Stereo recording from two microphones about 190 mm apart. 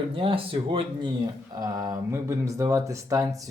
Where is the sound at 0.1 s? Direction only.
30° right (ahead or behind).